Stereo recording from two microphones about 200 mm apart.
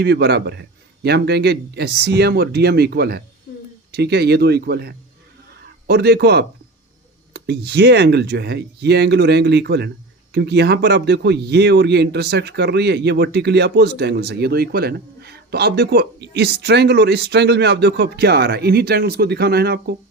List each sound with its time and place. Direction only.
0.0 s a man's voice: 55° right (ahead or behind)